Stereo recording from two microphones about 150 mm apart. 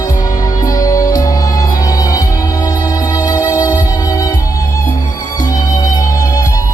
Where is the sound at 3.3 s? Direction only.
25° left (ahead or behind).